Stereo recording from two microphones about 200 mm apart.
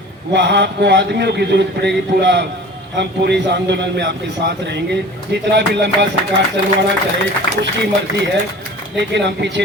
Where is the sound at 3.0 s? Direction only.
60° right (ahead or behind).